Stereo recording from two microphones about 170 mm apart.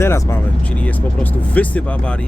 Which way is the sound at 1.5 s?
10° left (ahead or behind).